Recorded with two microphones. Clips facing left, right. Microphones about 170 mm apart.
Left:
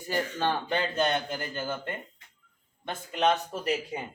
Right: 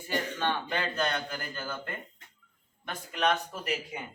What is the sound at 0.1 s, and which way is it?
Speech, 35° left (ahead or behind).